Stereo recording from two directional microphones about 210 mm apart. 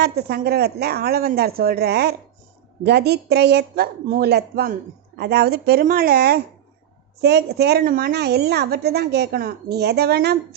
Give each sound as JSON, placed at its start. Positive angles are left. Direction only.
{"t": 0.0, "sound": "speech", "side_deg": -50}